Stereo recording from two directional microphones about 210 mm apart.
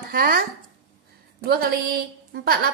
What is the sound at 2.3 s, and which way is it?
Speech, 50° right (ahead or behind).